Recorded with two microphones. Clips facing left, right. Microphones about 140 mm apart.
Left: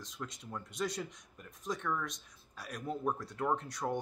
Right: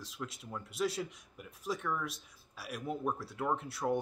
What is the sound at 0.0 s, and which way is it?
Speech, 5° right (ahead or behind).